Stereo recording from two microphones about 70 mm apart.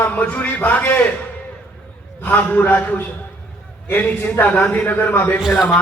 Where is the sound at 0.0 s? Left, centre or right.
Left.